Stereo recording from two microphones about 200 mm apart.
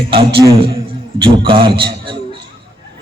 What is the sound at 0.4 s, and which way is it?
A man's voice, 25° right (ahead or behind).